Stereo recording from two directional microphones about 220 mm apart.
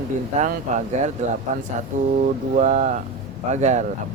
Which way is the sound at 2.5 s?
30° right (ahead or behind).